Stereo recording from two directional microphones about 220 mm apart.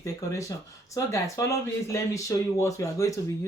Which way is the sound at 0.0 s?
15° left (ahead or behind).